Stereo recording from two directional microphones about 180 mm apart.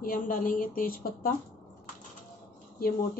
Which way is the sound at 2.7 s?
55° left (ahead or behind).